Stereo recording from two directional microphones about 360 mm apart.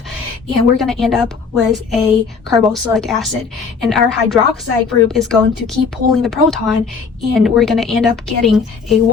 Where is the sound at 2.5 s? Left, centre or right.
Centre.